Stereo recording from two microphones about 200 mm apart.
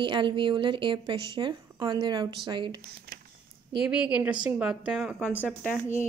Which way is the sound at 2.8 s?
50° right (ahead or behind).